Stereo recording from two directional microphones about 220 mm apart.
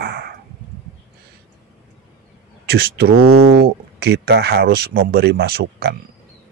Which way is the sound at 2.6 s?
45° right (ahead or behind).